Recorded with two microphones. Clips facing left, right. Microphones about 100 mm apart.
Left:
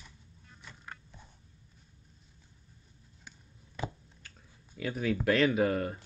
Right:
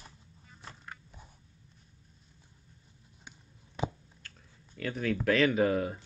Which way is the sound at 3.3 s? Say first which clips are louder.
Right 1 dB; 15° right (ahead or behind).